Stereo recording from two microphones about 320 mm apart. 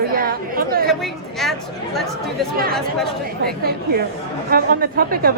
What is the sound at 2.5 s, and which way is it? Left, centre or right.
A woman's voice, right.